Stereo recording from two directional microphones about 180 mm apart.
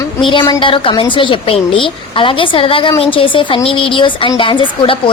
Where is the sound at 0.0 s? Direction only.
25° left (ahead or behind).